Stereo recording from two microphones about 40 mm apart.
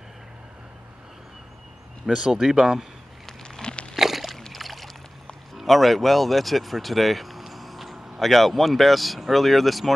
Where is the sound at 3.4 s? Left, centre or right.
Left.